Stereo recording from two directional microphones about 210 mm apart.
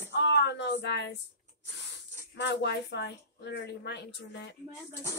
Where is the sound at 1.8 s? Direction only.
55° left (ahead or behind).